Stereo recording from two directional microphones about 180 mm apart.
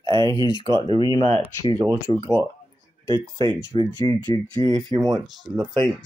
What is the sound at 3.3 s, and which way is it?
Speech, 30° right (ahead or behind).